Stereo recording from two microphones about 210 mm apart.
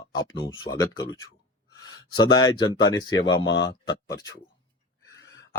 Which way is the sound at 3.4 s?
60° left (ahead or behind).